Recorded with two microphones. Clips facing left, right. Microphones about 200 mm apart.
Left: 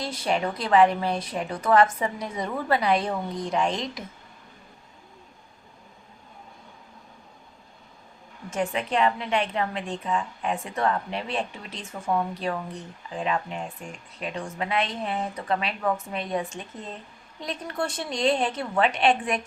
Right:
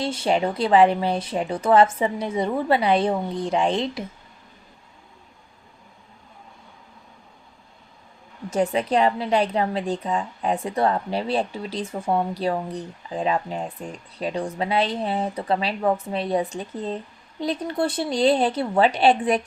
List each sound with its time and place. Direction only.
0.0 s a woman's voice: 30° right (ahead or behind)
8.4 s a woman's voice: 35° right (ahead or behind)